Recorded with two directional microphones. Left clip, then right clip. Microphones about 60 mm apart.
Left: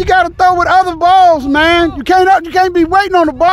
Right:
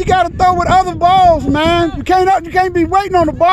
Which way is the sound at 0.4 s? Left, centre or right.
Left.